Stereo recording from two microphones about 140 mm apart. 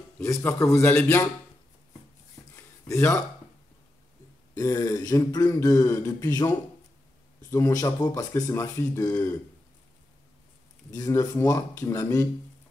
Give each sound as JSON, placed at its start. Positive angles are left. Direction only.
{"t": 0.2, "sound": "speech", "side_deg": 20}
{"t": 2.5, "sound": "a sound", "side_deg": 20}
{"t": 4.6, "sound": "speech", "side_deg": 25}
{"t": 7.5, "sound": "speech", "side_deg": 25}
{"t": 10.9, "sound": "speech", "side_deg": 25}